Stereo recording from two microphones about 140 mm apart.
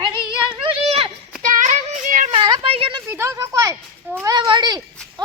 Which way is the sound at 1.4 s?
65° right (ahead or behind).